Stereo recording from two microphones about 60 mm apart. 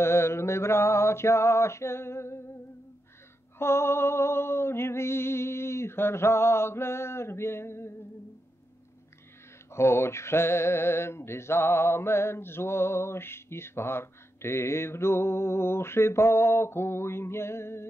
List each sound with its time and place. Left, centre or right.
0.0 s speech: left
3.5 s speech: left
9.7 s speech: left